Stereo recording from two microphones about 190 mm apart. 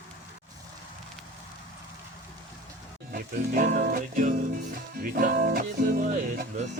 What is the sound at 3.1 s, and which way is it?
Music, 45° right (ahead or behind).